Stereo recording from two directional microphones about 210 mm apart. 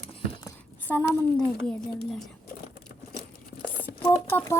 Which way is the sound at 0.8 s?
10° left (ahead or behind).